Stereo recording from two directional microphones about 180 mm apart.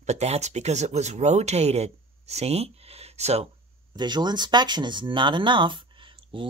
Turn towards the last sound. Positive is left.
turn(degrees=-30)  # may be behind; listen again after turning